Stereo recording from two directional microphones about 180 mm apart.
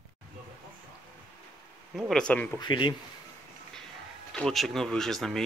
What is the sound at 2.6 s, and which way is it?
Speech, 25° left (ahead or behind).